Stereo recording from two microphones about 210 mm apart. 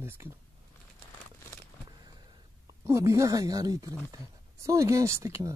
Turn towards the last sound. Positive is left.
turn(degrees=-15)  # may be behind; listen again after turning